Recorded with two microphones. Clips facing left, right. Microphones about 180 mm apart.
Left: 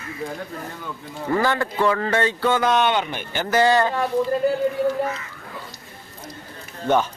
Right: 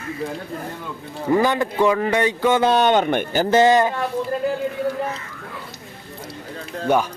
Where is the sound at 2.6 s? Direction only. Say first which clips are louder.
Right 5 dB; 30° right (ahead or behind); by 3.2 s 50° right (ahead or behind).